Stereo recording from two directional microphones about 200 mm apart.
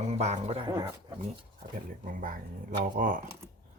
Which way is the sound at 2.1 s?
45° right (ahead or behind).